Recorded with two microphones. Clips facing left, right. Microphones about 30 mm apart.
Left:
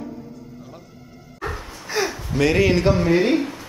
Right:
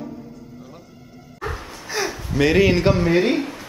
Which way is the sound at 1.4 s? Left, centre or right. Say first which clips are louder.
Even; centre.